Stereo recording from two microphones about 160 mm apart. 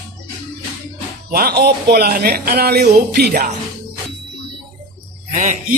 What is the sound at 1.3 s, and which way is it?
Speech, 75° right (ahead or behind).